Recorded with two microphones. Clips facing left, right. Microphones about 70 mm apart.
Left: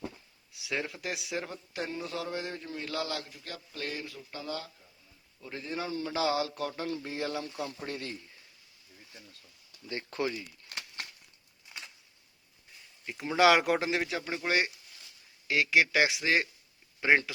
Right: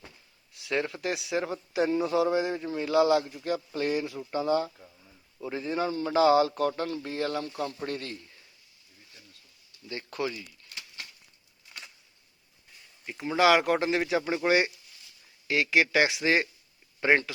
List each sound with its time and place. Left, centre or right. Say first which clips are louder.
0.5 s a man's voice: right 5 dB; centre; by 4.7 s right
5.4 s speech: right 7 dB; centre
9.9 s speech: even; left
10.7 s crumpling: left 5 dB; left
11.7 s a sound: even; centre
12.7 s speech: right 1 dB; centre
14.2 s a man's voice: right 5 dB; centre